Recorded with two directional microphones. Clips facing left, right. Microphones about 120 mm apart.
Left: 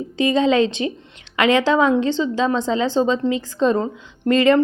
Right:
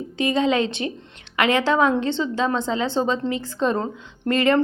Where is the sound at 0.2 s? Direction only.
25° left (ahead or behind).